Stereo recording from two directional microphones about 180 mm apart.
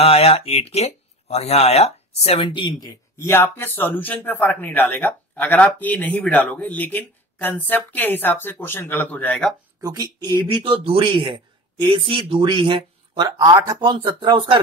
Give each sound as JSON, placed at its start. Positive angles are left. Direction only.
{"t": 0.0, "sound": "speech", "side_deg": 35}
{"t": 3.2, "sound": "speech", "side_deg": 10}
{"t": 9.8, "sound": "speech", "side_deg": -20}